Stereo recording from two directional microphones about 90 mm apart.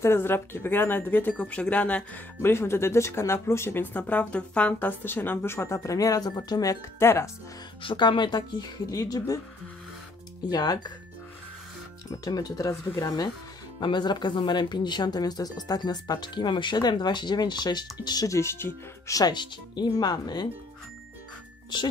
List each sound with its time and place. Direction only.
0.0 s speech: 25° left (ahead or behind)
2.4 s speech: 25° left (ahead or behind)
7.8 s speech: 65° left (ahead or behind); by 9.4 s 45° left (ahead or behind)
10.5 s speech: 50° left (ahead or behind)
12.1 s speech: 45° left (ahead or behind)
18.3 s speech: 30° left (ahead or behind)
19.1 s speech: 50° left (ahead or behind)
21.7 s speech: 55° left (ahead or behind)